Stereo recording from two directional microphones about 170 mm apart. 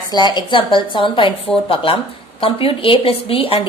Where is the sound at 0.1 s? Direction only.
25° left (ahead or behind).